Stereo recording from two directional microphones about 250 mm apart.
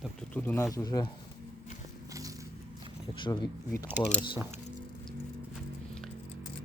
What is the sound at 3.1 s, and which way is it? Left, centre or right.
Speech, centre.